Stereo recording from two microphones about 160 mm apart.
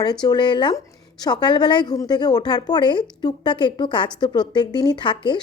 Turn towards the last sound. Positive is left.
turn(degrees=30)  # may be behind; listen again after turning